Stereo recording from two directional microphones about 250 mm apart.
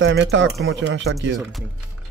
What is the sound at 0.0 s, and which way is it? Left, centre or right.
Speech, right.